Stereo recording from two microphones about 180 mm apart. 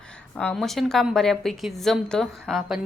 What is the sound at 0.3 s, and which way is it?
A woman's voice, 5° left (ahead or behind).